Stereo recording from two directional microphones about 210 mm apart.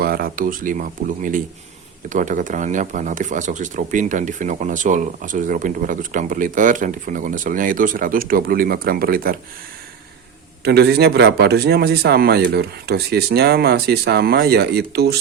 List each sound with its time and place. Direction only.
0.0 s speech: 45° right (ahead or behind)
10.6 s a man's voice: 55° right (ahead or behind)